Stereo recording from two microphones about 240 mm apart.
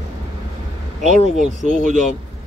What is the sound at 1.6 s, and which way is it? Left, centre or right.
Speech, left.